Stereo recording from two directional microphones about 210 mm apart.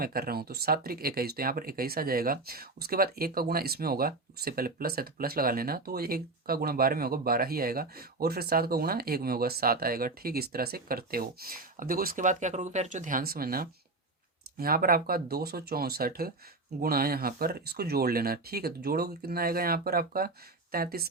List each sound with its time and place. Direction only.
0.0 s speech: 45° right (ahead or behind)